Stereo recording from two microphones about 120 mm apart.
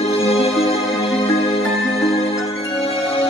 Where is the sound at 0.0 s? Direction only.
50° left (ahead or behind).